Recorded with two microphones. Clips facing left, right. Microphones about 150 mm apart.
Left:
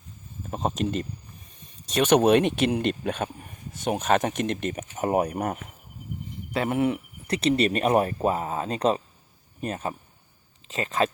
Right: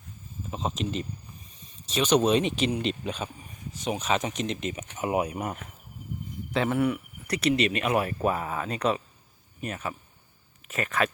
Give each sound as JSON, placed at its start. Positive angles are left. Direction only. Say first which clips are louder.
{"t": 0.5, "sound": "speech", "louder": "left 4 dB", "side_deg": 50}
{"t": 6.7, "sound": "speech", "louder": "left 4 dB", "side_deg": 25}
{"t": 7.5, "sound": "speech", "louder": "left 5 dB", "side_deg": 40}